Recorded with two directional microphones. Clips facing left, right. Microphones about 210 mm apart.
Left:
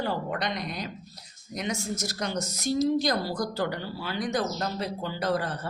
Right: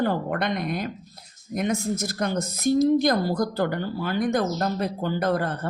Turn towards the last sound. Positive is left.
turn(degrees=-55)  # may be behind; listen again after turning